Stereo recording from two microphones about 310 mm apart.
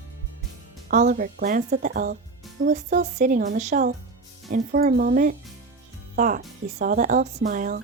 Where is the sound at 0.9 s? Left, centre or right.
Right.